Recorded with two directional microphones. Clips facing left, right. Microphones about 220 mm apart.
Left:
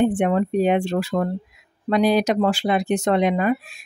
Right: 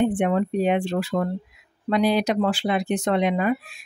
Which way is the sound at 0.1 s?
45° left (ahead or behind).